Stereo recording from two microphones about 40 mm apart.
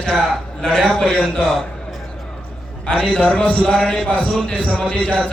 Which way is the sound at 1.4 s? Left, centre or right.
Centre.